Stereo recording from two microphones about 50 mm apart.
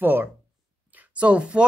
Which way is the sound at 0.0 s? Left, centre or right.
Right.